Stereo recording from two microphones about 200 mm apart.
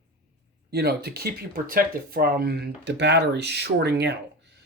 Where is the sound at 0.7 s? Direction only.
50° right (ahead or behind).